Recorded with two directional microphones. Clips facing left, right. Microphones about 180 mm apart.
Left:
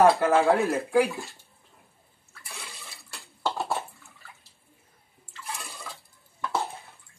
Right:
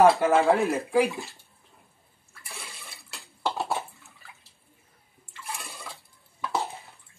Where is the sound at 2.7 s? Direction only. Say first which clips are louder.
Even; centre (ahead or behind).